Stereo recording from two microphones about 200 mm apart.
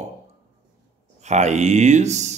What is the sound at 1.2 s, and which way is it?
Speech, 35° right (ahead or behind).